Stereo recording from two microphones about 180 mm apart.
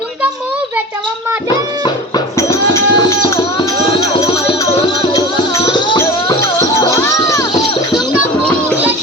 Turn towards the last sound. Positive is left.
turn(degrees=20)  # may be behind; listen again after turning